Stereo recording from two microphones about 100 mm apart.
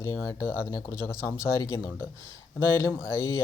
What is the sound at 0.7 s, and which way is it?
Speech, 25° left (ahead or behind).